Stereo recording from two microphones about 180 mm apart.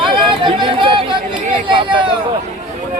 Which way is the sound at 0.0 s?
25° right (ahead or behind).